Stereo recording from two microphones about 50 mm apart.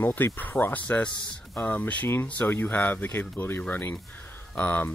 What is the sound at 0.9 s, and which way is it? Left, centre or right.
Speech, centre.